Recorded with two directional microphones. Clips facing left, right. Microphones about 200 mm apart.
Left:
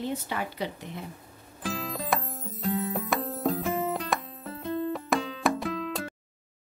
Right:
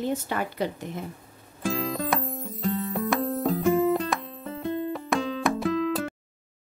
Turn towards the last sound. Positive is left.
turn(degrees=0)  # may be behind; listen again after turning